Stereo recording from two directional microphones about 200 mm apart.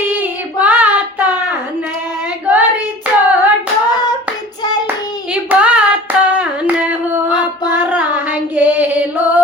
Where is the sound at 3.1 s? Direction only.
5° right (ahead or behind).